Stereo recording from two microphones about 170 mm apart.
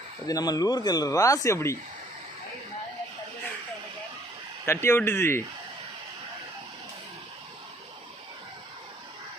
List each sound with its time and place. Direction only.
0.3 s speech: 20° left (ahead or behind)
4.6 s speech: 15° left (ahead or behind)